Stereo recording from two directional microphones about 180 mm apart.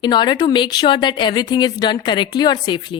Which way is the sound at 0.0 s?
25° left (ahead or behind).